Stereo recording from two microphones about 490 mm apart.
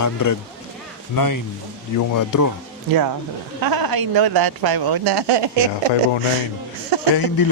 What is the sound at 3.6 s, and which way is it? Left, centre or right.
Speech, right.